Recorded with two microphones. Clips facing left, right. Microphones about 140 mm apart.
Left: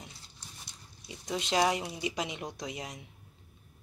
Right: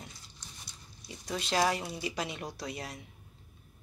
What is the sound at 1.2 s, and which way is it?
Speech, 20° left (ahead or behind).